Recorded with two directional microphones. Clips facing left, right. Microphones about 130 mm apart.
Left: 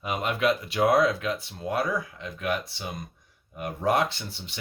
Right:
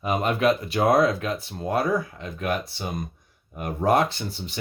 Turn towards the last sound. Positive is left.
turn(degrees=-40)  # may be behind; listen again after turning